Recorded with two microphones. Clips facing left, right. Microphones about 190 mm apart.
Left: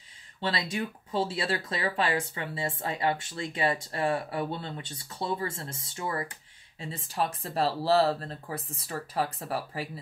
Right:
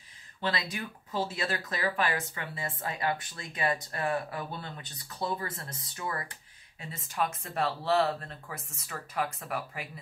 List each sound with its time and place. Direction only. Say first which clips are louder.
0.4 s speech: left 3 dB; 25° left (ahead or behind)